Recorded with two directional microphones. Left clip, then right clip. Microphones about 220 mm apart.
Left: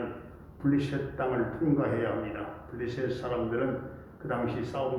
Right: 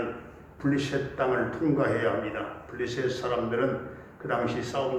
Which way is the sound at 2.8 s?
50° right (ahead or behind).